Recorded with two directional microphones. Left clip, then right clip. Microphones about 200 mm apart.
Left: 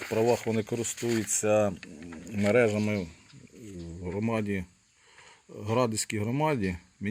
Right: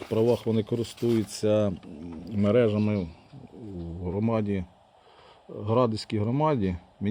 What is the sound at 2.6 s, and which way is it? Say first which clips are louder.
Speech: right 1 dB; 15° right (ahead or behind).